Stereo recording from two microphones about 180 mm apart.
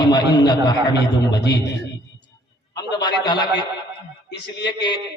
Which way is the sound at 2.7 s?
20° left (ahead or behind).